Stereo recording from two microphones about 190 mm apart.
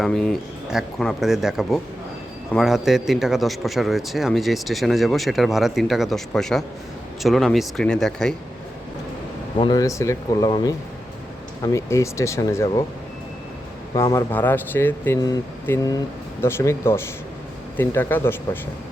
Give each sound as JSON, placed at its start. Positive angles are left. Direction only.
{"t": 0.0, "sound": "a man's voice", "side_deg": 5}
{"t": 9.6, "sound": "speech", "side_deg": 20}
{"t": 13.9, "sound": "speech", "side_deg": 15}